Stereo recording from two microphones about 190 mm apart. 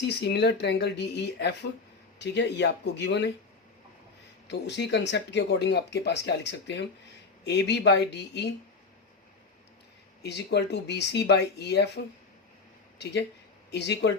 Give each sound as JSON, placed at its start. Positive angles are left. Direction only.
{"t": 0.2, "sound": "speech", "side_deg": 60}
{"t": 4.4, "sound": "speech", "side_deg": 65}
{"t": 10.2, "sound": "speech", "side_deg": 60}
{"t": 13.7, "sound": "speech", "side_deg": 60}